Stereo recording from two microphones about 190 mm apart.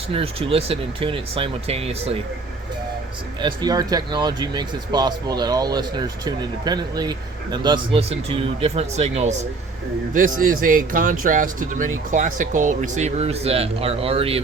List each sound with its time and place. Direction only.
0.1 s speech: 30° right (ahead or behind)
3.4 s speech: 20° right (ahead or behind)